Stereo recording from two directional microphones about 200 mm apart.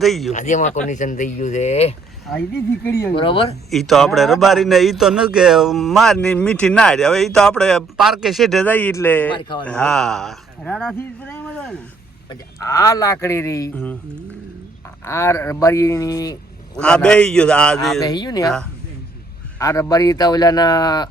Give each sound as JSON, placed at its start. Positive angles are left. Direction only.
{"t": 0.0, "sound": "a man's voice", "side_deg": 0}
{"t": 0.3, "sound": "speech", "side_deg": 40}
{"t": 2.8, "sound": "a man's voice", "side_deg": 10}
{"t": 3.2, "sound": "speech", "side_deg": 25}
{"t": 3.7, "sound": "a man's voice", "side_deg": 0}
{"t": 9.3, "sound": "speech", "side_deg": 25}
{"t": 9.6, "sound": "a man's voice", "side_deg": 5}
{"t": 12.3, "sound": "a man's voice", "side_deg": 15}
{"t": 15.0, "sound": "a man's voice", "side_deg": 15}
{"t": 16.7, "sound": "a man's voice", "side_deg": 5}
{"t": 18.0, "sound": "speech", "side_deg": 20}
{"t": 19.5, "sound": "speech", "side_deg": 15}